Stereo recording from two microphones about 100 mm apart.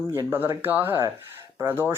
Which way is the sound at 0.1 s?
25° right (ahead or behind).